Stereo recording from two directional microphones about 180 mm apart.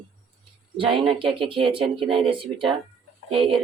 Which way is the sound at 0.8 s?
30° right (ahead or behind).